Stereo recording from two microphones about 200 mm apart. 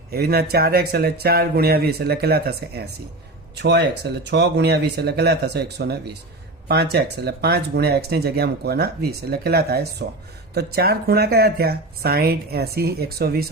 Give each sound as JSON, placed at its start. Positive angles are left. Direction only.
{"t": 0.1, "sound": "speech", "side_deg": -50}